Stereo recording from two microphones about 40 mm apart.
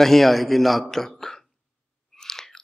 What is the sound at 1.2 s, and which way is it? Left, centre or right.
Hiccup, centre.